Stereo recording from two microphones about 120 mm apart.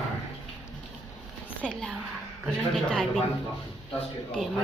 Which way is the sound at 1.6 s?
5° left (ahead or behind).